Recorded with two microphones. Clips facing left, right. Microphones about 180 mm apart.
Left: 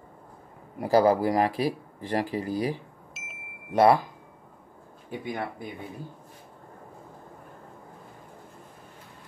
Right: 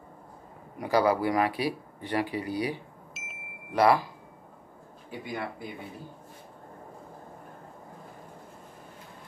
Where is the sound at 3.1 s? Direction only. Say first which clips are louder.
Even; centre (ahead or behind).